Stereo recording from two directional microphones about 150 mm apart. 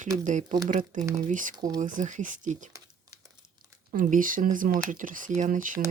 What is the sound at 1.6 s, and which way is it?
Speech, 25° right (ahead or behind).